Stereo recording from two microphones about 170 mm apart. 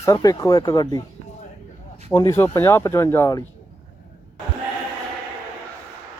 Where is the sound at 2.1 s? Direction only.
20° left (ahead or behind).